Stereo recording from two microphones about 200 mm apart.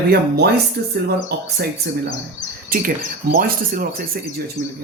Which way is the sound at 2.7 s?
45° right (ahead or behind).